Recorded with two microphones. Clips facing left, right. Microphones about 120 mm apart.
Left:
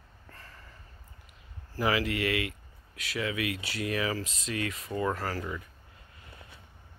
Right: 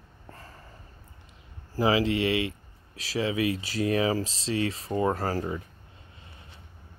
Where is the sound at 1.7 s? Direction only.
25° right (ahead or behind).